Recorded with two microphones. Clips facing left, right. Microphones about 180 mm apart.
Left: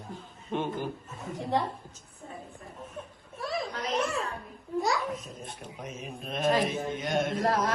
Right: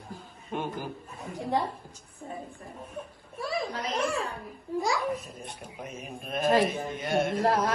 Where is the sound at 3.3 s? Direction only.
Centre (ahead or behind).